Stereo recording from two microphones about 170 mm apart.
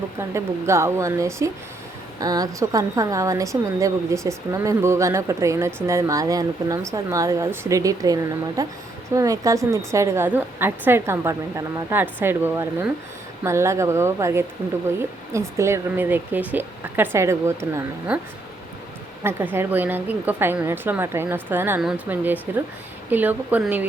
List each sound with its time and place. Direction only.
0.2 s a woman's voice: 15° right (ahead or behind)
19.2 s speech: 15° right (ahead or behind)